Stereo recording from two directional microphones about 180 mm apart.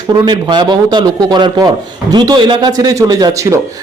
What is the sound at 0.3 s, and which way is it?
Speech, 25° right (ahead or behind).